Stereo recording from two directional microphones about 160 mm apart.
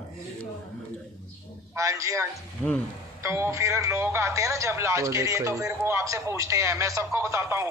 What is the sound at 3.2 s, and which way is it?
Speech, 15° right (ahead or behind).